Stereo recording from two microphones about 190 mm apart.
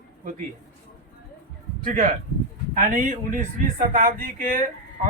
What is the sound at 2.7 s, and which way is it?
Speech, 45° right (ahead or behind).